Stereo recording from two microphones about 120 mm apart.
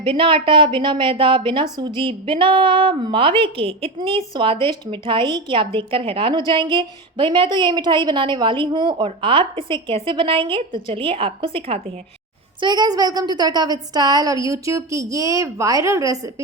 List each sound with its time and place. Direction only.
0.0 s a woman's voice: 45° right (ahead or behind)
12.5 s a woman's voice: 35° right (ahead or behind)